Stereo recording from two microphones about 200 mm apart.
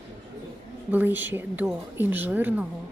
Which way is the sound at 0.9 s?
10° right (ahead or behind).